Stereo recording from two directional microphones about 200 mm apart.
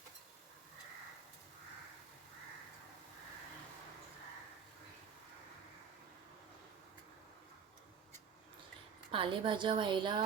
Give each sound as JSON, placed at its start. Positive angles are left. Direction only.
{"t": 9.1, "sound": "a woman's voice", "side_deg": -25}